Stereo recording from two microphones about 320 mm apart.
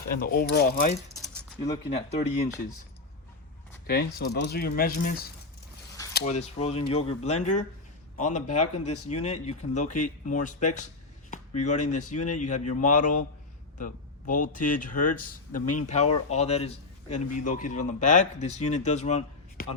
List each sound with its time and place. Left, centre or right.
0.1 s speech: left
1.5 s speech: centre
3.8 s speech: left
8.4 s speech: left
9.0 s speech: left
11.3 s a sound: left
12.1 s speech: left